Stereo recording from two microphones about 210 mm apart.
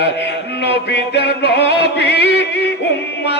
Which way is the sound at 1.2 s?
55° left (ahead or behind).